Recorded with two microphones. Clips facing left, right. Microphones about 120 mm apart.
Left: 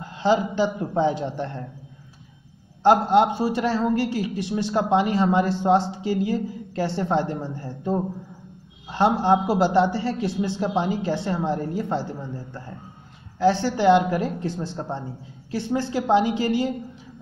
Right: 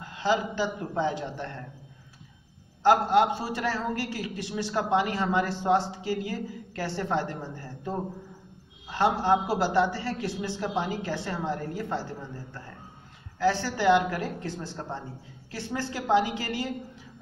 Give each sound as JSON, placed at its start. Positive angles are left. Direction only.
{"t": 0.0, "sound": "a man's voice", "side_deg": 30}
{"t": 2.8, "sound": "a man's voice", "side_deg": 25}
{"t": 13.4, "sound": "a man's voice", "side_deg": 25}